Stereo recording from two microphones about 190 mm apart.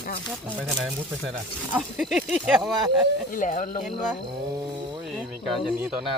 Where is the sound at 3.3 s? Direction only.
45° left (ahead or behind).